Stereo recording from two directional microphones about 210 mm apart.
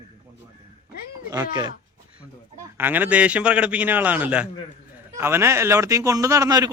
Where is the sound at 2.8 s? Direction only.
10° right (ahead or behind).